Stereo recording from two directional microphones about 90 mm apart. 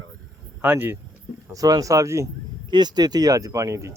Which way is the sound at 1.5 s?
40° right (ahead or behind).